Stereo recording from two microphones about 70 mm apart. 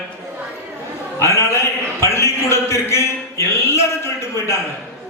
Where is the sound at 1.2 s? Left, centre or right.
Left.